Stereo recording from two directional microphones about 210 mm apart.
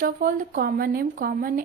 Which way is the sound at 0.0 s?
40° right (ahead or behind).